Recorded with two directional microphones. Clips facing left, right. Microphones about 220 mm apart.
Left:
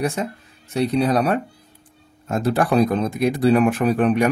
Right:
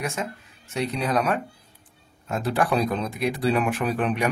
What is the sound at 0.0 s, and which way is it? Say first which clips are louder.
Speech: left 6 dB; 35° left (ahead or behind).